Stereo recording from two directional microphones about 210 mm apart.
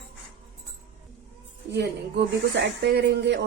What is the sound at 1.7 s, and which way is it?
A woman's voice, 55° right (ahead or behind).